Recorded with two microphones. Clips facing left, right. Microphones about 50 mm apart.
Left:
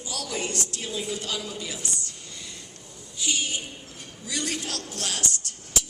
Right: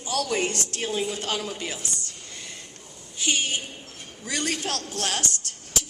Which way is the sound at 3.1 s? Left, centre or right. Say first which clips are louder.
Right 3 dB; right.